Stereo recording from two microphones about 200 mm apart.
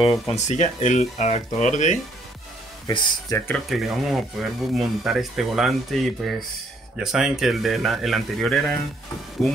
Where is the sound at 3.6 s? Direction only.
Centre (ahead or behind).